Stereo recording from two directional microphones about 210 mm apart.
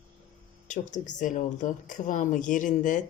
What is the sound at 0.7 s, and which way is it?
Speech, 35° left (ahead or behind).